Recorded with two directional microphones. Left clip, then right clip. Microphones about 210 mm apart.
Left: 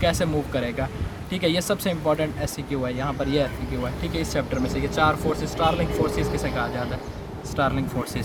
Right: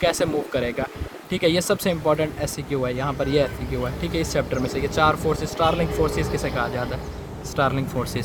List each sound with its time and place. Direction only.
0.0 s speech: 25° right (ahead or behind)